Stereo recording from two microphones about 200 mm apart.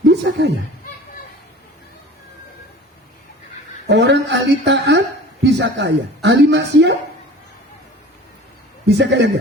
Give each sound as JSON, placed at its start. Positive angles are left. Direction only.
{"t": 0.0, "sound": "fowl", "side_deg": -65}
{"t": 3.8, "sound": "speech", "side_deg": -60}
{"t": 9.0, "sound": "speech", "side_deg": -60}